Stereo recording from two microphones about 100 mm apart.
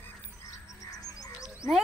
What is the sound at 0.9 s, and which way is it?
Frog, 40° left (ahead or behind).